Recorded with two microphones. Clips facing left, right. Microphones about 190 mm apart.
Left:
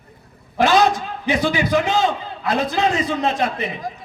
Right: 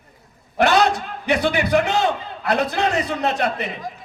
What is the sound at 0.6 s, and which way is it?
A man's voice, 65° right (ahead or behind).